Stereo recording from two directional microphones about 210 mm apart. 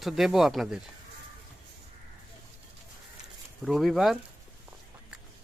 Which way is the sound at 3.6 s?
Centre (ahead or behind).